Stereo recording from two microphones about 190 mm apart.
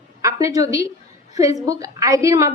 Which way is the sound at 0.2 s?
15° right (ahead or behind).